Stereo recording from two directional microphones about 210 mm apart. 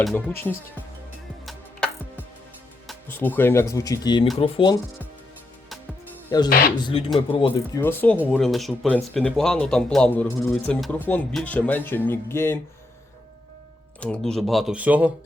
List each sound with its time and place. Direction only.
0.1 s speech: 10° left (ahead or behind)
3.1 s speech: 10° left (ahead or behind); by 4.8 s 25° left (ahead or behind)
6.5 s speech: 45° left (ahead or behind)
7.3 s speech: 25° left (ahead or behind)
7.8 s speech: 10° left (ahead or behind)
14.0 s speech: 5° left (ahead or behind)